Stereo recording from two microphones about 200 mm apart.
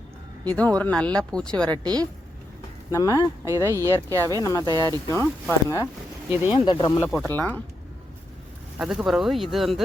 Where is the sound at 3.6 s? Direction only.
15° right (ahead or behind).